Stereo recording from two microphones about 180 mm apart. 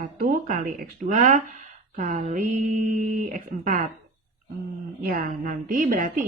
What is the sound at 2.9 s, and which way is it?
Speech, 45° right (ahead or behind).